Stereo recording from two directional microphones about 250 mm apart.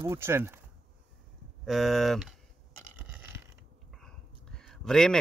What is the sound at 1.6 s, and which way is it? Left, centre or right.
Speech, centre.